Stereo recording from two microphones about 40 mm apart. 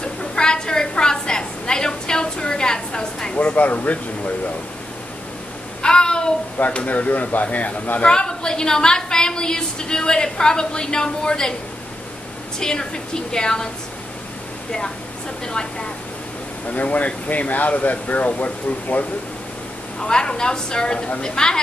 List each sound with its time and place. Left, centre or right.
0.0 s a sound: left
3.3 s speech: left
5.8 s a sound: left
6.6 s speech: left
8.0 s a woman's voice: left
12.5 s a woman's voice: centre
16.6 s speech: left
20.0 s a woman's voice: centre